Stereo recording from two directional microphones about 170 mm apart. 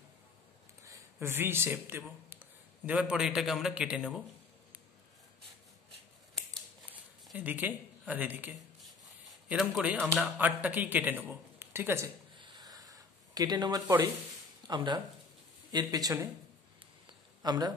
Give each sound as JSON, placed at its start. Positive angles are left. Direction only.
{"t": 0.8, "sound": "a man's voice", "side_deg": -15}
{"t": 6.9, "sound": "a sound", "side_deg": -10}
{"t": 8.1, "sound": "a man's voice", "side_deg": -10}
{"t": 12.4, "sound": "a sound", "side_deg": -25}
{"t": 14.7, "sound": "speech", "side_deg": -25}
{"t": 17.4, "sound": "speech", "side_deg": -25}